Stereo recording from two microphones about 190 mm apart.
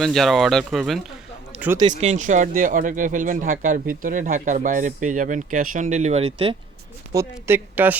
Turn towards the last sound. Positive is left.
turn(degrees=-10)  # may be behind; listen again after turning